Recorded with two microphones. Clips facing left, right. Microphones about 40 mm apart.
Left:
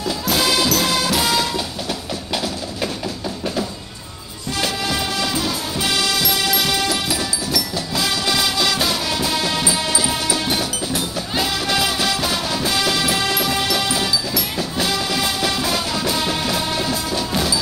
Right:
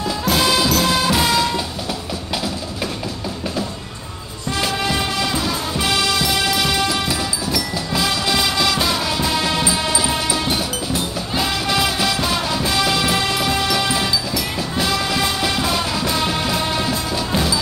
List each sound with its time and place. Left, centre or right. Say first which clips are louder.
0.3 s music: right 1 dB; centre
4.6 s music: right 1 dB; centre
11.7 s music: right 1 dB; centre